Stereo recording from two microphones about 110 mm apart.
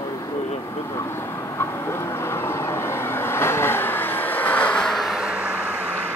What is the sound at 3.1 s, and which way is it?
Vehicle, 20° left (ahead or behind).